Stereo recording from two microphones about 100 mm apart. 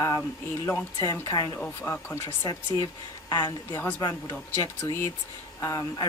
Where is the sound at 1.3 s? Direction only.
45° left (ahead or behind).